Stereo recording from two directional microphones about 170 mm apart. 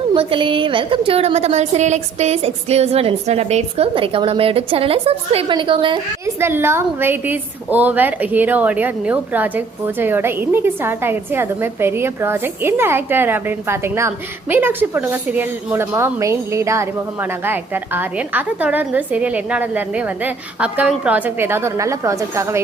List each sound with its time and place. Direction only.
0.1 s a woman's voice: 30° right (ahead or behind)
6.2 s a woman's voice: 15° right (ahead or behind)